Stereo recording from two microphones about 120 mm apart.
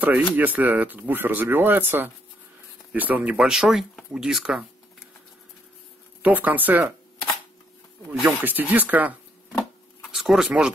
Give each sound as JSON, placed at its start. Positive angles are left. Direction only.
{"t": 0.0, "sound": "speech", "side_deg": -15}
{"t": 6.2, "sound": "speech", "side_deg": -15}
{"t": 8.1, "sound": "speech", "side_deg": -5}
{"t": 8.4, "sound": "speech", "side_deg": -15}
{"t": 9.5, "sound": "a sound", "side_deg": 5}